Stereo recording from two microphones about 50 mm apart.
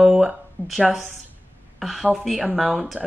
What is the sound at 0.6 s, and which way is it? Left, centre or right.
Speech, left.